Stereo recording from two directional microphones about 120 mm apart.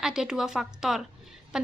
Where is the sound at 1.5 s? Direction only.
5° right (ahead or behind).